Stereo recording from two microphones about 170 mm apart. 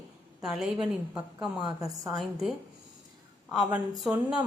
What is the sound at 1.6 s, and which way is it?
Speech, 25° right (ahead or behind).